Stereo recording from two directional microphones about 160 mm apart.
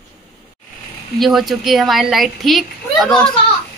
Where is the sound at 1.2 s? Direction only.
Centre (ahead or behind).